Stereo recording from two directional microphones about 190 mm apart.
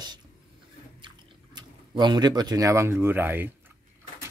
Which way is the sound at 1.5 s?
25° right (ahead or behind).